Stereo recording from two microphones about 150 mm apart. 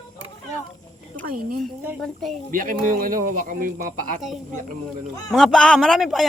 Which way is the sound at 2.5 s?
65° right (ahead or behind).